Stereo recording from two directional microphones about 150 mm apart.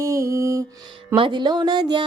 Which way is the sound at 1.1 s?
35° right (ahead or behind).